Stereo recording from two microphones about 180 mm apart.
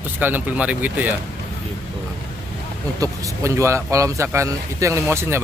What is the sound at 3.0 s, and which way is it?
Speech, 15° right (ahead or behind).